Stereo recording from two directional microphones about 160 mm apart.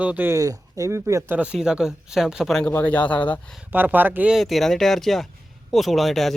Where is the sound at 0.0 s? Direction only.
10° right (ahead or behind).